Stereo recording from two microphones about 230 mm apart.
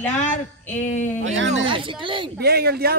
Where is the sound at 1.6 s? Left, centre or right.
Right.